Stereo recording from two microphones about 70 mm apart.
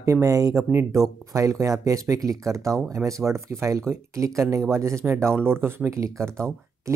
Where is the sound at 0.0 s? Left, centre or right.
Right.